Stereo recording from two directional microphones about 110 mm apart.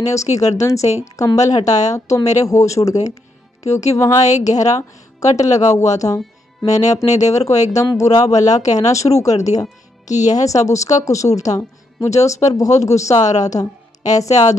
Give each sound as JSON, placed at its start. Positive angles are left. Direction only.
{"t": 0.0, "sound": "a woman's voice", "side_deg": 30}
{"t": 0.7, "sound": "a woman's voice", "side_deg": 90}
{"t": 1.0, "sound": "a woman's voice", "side_deg": 30}
{"t": 7.1, "sound": "a woman's voice", "side_deg": 90}
{"t": 7.3, "sound": "a woman's voice", "side_deg": 30}
{"t": 10.0, "sound": "speech", "side_deg": 90}
{"t": 10.3, "sound": "a woman's voice", "side_deg": 30}
{"t": 13.2, "sound": "a woman's voice", "side_deg": 90}
{"t": 13.6, "sound": "a woman's voice", "side_deg": 35}